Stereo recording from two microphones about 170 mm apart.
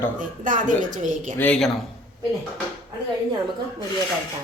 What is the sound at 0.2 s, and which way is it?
A woman's voice, 50° right (ahead or behind).